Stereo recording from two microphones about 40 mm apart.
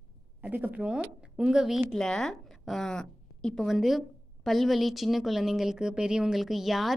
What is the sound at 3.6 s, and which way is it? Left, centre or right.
Speech, centre.